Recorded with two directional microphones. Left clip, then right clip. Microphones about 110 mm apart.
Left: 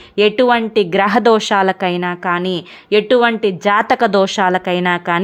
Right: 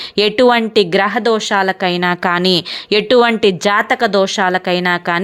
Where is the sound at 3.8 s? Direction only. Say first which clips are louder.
Left 1 dB; 25° left (ahead or behind).